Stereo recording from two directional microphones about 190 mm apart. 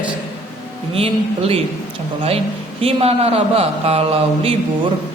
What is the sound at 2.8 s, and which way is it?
A man's voice, 30° right (ahead or behind).